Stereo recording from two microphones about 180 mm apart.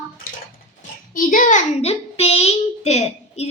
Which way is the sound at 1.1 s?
50° left (ahead or behind).